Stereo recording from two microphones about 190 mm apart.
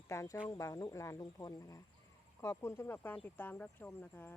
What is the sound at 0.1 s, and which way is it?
Speech, 15° left (ahead or behind).